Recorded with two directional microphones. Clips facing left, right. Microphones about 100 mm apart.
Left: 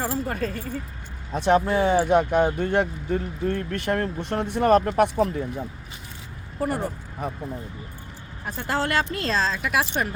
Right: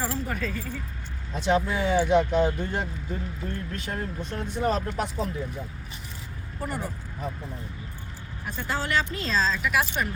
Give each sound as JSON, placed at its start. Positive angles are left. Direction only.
{"t": 0.3, "sound": "speech", "side_deg": 45}
{"t": 6.6, "sound": "speech", "side_deg": 50}
{"t": 8.4, "sound": "speech", "side_deg": 50}